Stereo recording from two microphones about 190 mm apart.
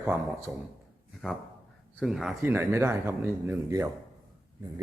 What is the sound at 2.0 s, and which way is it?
A man's voice, centre (ahead or behind).